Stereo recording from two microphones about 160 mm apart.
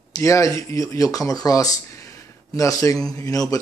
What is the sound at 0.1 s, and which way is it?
Speech, 20° left (ahead or behind).